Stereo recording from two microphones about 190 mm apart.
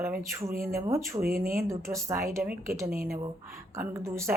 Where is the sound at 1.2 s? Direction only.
50° right (ahead or behind).